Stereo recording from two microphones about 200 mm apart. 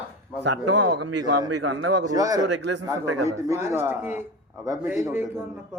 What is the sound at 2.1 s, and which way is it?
Speech, 20° right (ahead or behind).